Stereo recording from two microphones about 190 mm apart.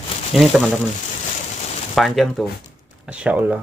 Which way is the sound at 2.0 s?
Centre (ahead or behind).